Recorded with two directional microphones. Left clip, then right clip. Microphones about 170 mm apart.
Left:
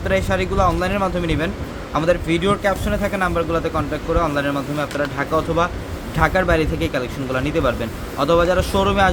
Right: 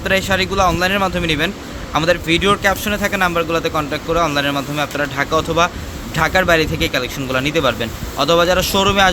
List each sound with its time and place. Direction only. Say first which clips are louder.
0.0 s a man's voice: right 3 dB; 15° right (ahead or behind)